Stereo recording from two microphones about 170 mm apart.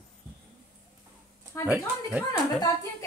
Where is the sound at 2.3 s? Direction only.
20° left (ahead or behind).